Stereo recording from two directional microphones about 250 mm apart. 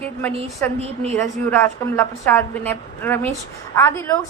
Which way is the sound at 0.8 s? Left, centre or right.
Right.